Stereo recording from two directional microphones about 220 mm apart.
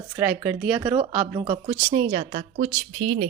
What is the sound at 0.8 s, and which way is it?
Speech, 20° right (ahead or behind).